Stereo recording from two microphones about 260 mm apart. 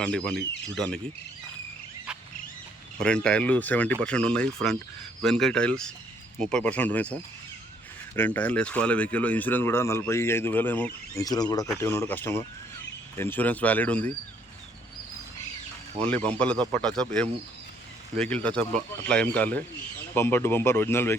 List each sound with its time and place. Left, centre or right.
0.0 s speech: centre
3.0 s speech: centre
16.0 s speech: centre
18.2 s speech: centre